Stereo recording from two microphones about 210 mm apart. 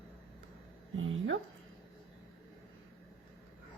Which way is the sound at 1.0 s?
65° right (ahead or behind).